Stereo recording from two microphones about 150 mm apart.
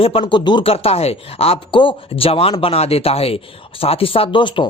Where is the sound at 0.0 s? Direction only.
35° left (ahead or behind).